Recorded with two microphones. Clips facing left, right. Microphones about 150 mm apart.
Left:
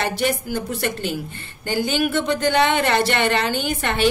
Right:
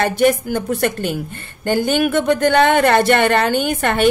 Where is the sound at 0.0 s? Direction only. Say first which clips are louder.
Right 7 dB; 50° right (ahead or behind).